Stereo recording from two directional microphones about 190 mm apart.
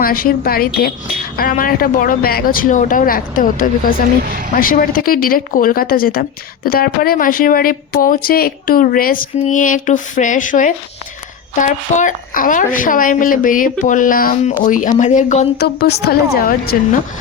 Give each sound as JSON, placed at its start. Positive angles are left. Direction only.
{"t": 0.0, "sound": "speech", "side_deg": 50}
{"t": 15.5, "sound": "a woman's voice", "side_deg": 55}